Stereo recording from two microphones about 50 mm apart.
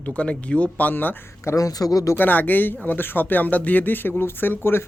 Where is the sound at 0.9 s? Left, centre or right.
Left.